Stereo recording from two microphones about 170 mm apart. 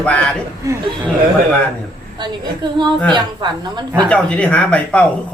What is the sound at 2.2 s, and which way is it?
Speech, 25° right (ahead or behind).